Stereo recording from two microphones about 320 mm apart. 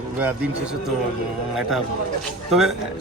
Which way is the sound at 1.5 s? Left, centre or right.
Centre.